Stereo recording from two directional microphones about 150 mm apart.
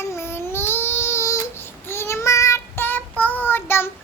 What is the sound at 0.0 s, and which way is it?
Child singing, 15° left (ahead or behind).